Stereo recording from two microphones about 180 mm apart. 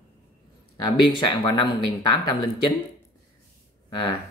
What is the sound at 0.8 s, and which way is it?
Speech, 25° left (ahead or behind).